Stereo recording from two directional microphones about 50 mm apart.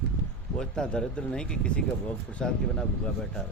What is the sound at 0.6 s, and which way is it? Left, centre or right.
Speech, centre.